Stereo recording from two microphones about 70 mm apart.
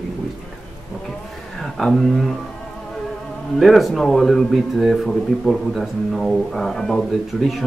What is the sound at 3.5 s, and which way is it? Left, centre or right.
Speech, centre.